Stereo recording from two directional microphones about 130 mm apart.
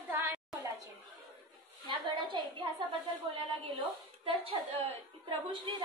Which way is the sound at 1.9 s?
35° right (ahead or behind).